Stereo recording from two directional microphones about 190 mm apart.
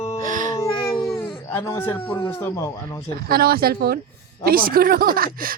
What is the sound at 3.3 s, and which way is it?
Speech, 50° right (ahead or behind).